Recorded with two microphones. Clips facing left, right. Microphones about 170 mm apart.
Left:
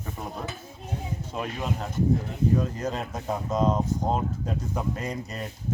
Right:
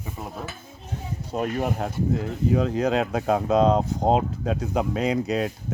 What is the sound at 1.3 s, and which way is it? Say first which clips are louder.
Speech: right 7 dB; 50° right (ahead or behind).